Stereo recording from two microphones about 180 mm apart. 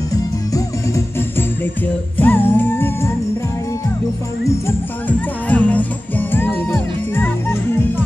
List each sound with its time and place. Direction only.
0.1 s music: 20° left (ahead or behind)
2.1 s music: 10° left (ahead or behind)
4.5 s music: 10° left (ahead or behind)